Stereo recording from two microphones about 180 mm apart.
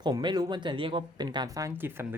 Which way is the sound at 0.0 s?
25° right (ahead or behind).